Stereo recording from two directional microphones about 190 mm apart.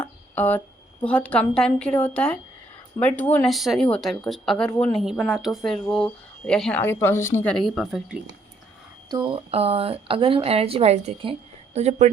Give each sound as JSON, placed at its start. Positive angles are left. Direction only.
{"t": 0.3, "sound": "a woman's voice", "side_deg": 10}
{"t": 9.0, "sound": "a woman's voice", "side_deg": -25}